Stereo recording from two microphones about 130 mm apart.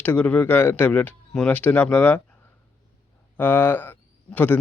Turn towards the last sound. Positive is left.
turn(degrees=15)  # may be behind; listen again after turning